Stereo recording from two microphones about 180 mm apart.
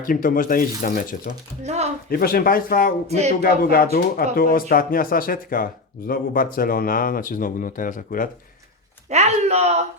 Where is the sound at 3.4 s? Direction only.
55° left (ahead or behind).